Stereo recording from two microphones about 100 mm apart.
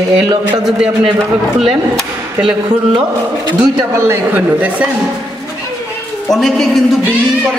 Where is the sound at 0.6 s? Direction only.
5° right (ahead or behind).